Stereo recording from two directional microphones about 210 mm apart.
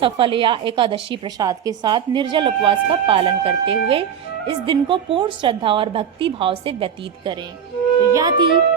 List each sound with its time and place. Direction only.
0.0 s a woman's voice: 25° right (ahead or behind)